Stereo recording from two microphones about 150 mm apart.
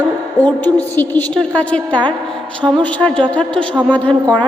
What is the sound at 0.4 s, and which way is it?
A woman's voice, 10° left (ahead or behind).